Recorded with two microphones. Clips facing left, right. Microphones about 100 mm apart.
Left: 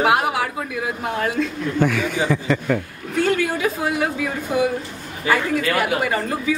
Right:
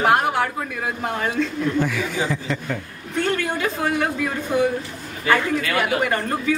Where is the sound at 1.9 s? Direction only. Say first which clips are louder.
Left 3 dB; 60° left (ahead or behind).